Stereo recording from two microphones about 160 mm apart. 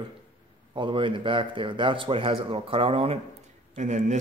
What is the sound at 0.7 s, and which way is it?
Speech, 30° right (ahead or behind).